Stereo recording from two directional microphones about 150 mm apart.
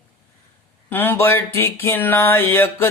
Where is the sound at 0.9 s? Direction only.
15° left (ahead or behind).